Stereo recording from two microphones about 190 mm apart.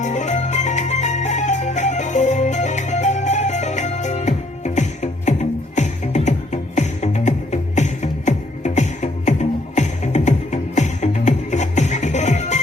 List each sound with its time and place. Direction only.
0.0 s music: 40° left (ahead or behind)